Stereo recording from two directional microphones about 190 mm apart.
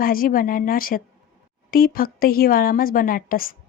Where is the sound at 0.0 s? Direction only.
50° left (ahead or behind).